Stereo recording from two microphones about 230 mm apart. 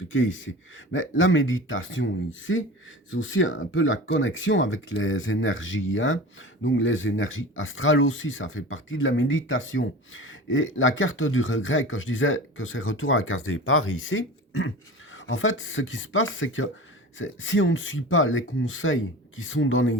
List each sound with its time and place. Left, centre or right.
0.1 s speech: left
3.1 s speech: left